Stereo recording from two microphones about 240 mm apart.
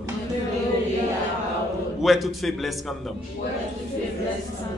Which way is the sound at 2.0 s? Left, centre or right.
Centre.